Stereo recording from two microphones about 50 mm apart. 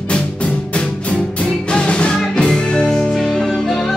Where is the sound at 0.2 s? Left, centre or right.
Centre.